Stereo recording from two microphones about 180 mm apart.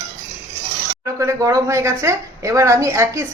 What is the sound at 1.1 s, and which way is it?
Speech, 15° right (ahead or behind).